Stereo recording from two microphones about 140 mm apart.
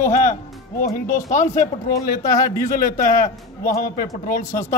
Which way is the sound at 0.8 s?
75° left (ahead or behind).